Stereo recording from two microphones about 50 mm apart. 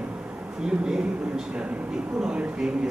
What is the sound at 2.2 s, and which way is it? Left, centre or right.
Speech, centre.